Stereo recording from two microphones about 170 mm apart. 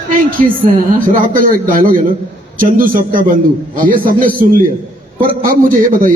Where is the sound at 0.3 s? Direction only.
55° right (ahead or behind).